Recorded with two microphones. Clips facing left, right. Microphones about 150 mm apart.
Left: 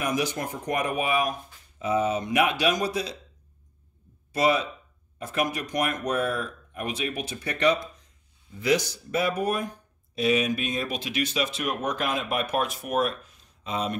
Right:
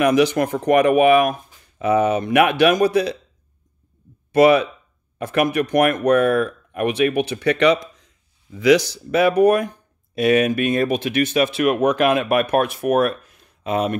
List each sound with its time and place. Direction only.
0.0 s speech: 70° right (ahead or behind)
4.3 s speech: 65° right (ahead or behind)